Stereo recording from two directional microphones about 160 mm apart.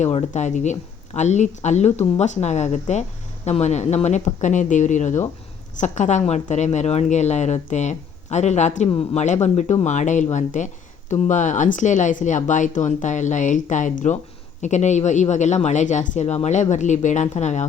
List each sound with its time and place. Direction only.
0.0 s a woman's voice: 40° left (ahead or behind)